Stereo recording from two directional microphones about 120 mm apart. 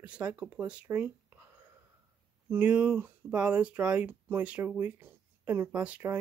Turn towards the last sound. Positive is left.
turn(degrees=-15)  # may be behind; listen again after turning